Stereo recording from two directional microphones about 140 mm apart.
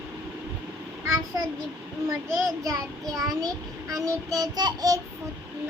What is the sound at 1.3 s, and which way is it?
Child singing, 20° right (ahead or behind).